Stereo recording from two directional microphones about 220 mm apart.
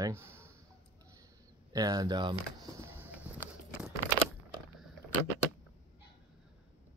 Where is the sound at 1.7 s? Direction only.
15° right (ahead or behind).